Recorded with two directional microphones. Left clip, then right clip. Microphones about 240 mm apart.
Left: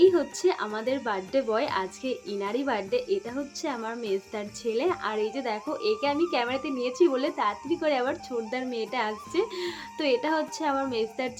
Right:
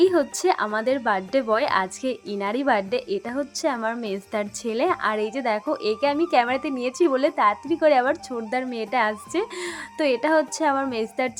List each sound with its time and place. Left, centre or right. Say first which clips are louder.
0.0 s a woman's voice: right 2 dB; right